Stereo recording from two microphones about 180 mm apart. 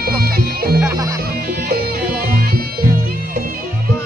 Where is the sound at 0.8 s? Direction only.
20° right (ahead or behind).